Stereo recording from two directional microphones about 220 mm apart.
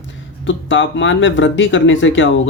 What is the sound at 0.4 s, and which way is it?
A man's voice, 60° left (ahead or behind).